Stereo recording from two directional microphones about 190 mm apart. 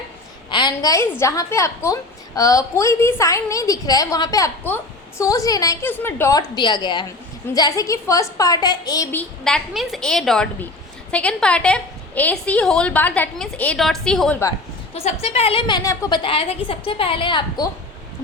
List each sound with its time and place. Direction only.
0.5 s a woman's voice: 20° left (ahead or behind)
9.1 s a woman's voice: 5° left (ahead or behind)
14.9 s a woman's voice: 35° left (ahead or behind)